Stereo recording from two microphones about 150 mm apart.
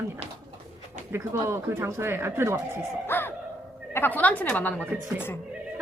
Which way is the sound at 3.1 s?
15° left (ahead or behind).